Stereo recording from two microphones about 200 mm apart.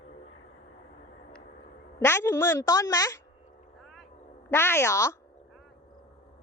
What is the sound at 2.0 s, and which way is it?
A woman's voice, 15° left (ahead or behind).